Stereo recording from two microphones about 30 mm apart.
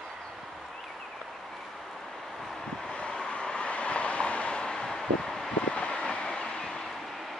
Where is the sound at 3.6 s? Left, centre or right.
Left.